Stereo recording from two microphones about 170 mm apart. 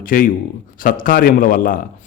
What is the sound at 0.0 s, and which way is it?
A man's voice, 55° left (ahead or behind).